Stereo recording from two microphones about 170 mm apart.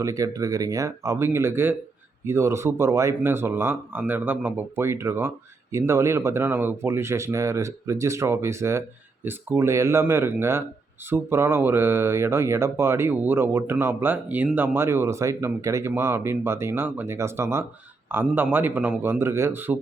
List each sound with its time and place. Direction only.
0.0 s speech: 20° right (ahead or behind)